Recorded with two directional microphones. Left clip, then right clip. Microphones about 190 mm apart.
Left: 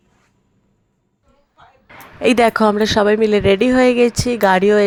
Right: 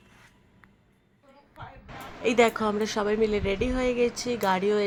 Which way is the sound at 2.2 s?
40° left (ahead or behind).